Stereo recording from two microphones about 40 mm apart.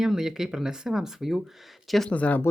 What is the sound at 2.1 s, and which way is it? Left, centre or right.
Speech, left.